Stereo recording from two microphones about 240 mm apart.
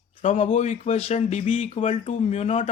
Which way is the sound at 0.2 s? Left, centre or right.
Left.